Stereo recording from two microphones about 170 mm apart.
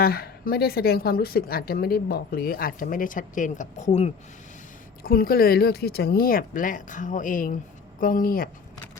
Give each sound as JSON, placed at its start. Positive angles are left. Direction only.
{"t": 0.0, "sound": "a woman's voice", "side_deg": 60}
{"t": 5.0, "sound": "a woman's voice", "side_deg": 60}